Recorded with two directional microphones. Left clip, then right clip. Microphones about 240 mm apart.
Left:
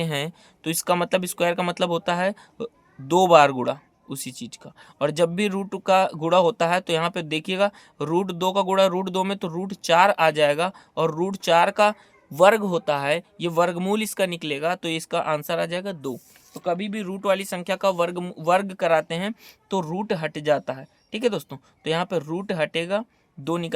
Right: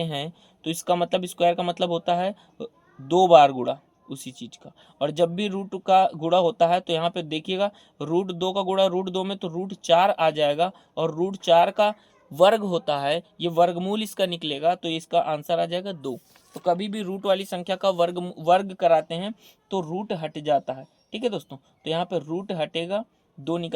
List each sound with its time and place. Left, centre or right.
0.0 s speech: left
16.6 s speech: centre; by 23.7 s left